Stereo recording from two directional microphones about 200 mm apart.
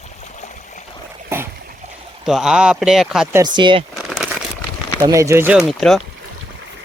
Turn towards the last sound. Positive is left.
turn(degrees=0)  # may be behind; listen again after turning